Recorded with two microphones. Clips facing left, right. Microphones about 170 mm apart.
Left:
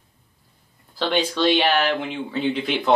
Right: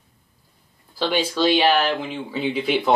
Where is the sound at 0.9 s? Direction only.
5° right (ahead or behind).